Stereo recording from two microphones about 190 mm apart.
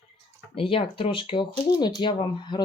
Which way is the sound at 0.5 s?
30° left (ahead or behind).